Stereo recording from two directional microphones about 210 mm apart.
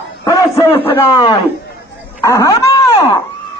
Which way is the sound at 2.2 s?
15° left (ahead or behind).